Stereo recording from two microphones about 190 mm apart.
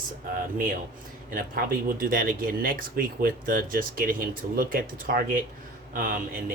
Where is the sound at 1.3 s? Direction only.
50° right (ahead or behind).